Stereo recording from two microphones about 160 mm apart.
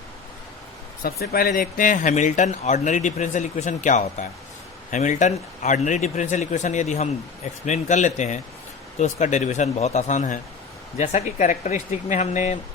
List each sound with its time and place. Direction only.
1.0 s speech: 70° left (ahead or behind); by 12.5 s 45° left (ahead or behind)